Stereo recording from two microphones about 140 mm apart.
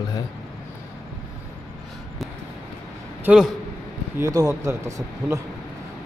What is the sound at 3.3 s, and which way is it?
Speech, 15° right (ahead or behind).